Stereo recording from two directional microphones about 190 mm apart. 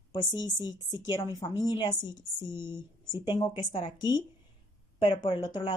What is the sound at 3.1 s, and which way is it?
A woman's voice, 25° left (ahead or behind).